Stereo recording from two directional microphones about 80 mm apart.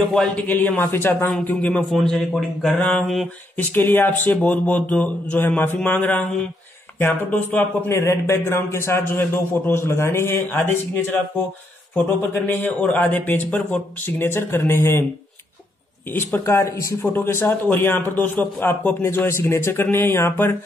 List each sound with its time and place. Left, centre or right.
0.5 s a man's voice: left
1.9 s a man's voice: centre
3.7 s speech: left
7.9 s a man's voice: left
12.2 s speech: left
16.1 s speech: left